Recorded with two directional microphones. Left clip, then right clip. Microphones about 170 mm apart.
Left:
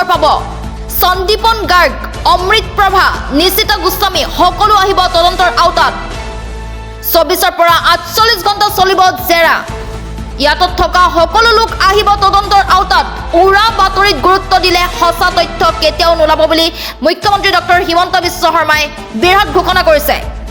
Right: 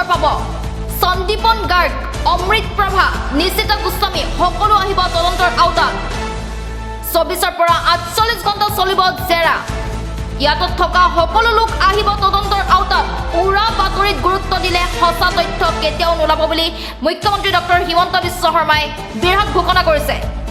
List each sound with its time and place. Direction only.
0.1 s music: 45° left (ahead or behind)
0.9 s a woman's voice: 40° left (ahead or behind)
7.1 s a woman's voice: 40° left (ahead or behind)